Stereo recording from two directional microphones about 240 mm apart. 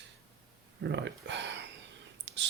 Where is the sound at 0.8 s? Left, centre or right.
Right.